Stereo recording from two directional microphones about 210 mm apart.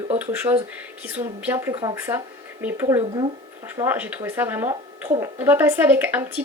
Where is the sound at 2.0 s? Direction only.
10° right (ahead or behind).